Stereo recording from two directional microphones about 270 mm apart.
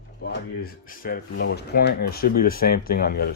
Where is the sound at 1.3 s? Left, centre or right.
Left.